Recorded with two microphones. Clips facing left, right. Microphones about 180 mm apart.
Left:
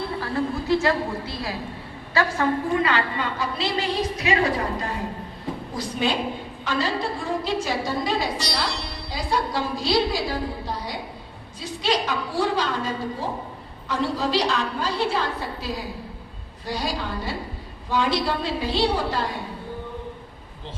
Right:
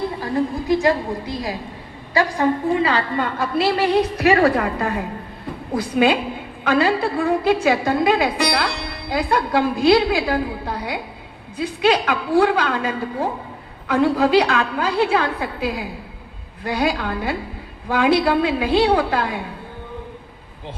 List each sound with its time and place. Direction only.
0.2 s a woman's voice: 15° right (ahead or behind)
3.2 s a woman's voice: 50° right (ahead or behind)